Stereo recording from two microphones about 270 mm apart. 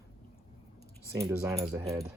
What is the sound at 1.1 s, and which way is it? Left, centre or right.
Speech, centre.